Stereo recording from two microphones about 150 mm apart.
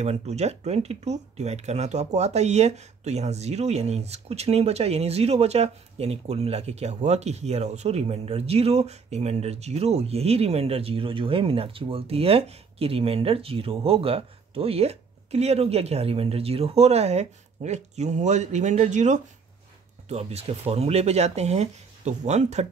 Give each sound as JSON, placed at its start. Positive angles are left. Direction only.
{"t": 0.0, "sound": "speech", "side_deg": -45}